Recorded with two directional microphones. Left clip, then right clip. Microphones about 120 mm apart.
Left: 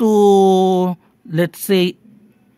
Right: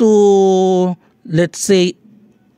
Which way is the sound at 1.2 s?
35° right (ahead or behind).